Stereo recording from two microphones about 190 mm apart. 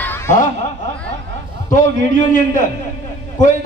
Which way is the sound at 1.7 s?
40° left (ahead or behind).